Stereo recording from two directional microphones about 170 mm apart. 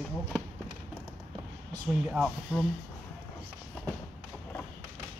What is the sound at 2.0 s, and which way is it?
Speech, 5° right (ahead or behind).